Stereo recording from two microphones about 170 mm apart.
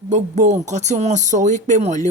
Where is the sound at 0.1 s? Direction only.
45° right (ahead or behind).